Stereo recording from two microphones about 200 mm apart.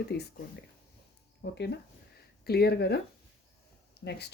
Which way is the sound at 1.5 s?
60° left (ahead or behind).